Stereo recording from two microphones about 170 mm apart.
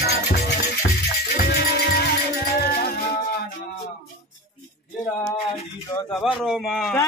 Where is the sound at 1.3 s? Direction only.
70° left (ahead or behind).